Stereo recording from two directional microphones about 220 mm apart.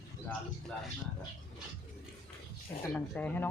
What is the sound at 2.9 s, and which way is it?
Speech, 5° left (ahead or behind).